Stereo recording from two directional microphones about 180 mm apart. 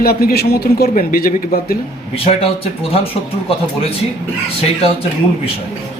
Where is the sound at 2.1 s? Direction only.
30° left (ahead or behind).